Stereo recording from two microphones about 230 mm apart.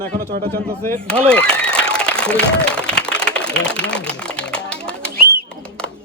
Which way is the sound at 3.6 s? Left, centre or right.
Centre.